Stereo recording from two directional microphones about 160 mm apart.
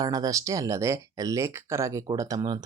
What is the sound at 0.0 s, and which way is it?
Speech, 25° right (ahead or behind).